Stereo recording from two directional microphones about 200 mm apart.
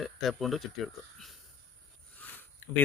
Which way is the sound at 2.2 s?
10° left (ahead or behind).